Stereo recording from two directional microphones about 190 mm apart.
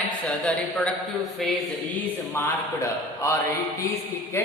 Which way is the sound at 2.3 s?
15° left (ahead or behind).